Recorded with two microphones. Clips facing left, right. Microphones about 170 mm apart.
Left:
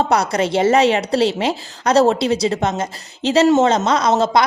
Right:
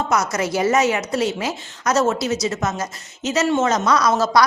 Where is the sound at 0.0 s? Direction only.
30° left (ahead or behind).